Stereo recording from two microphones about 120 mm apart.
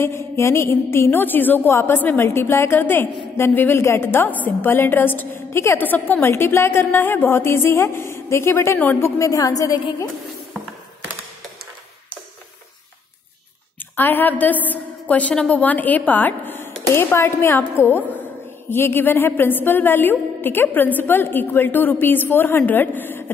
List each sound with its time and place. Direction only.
0.0 s a woman's voice: 20° left (ahead or behind)
9.2 s a woman's voice: 30° left (ahead or behind)
13.9 s a woman's voice: 15° left (ahead or behind)